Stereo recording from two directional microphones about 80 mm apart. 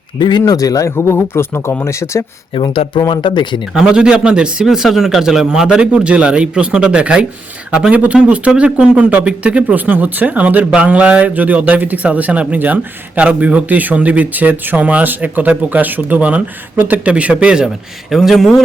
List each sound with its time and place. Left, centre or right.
0.2 s speech: left
0.5 s speech: left
0.9 s speech: left
2.6 s speech: left
3.1 s speech: left
3.8 s speech: centre
18.1 s speech: centre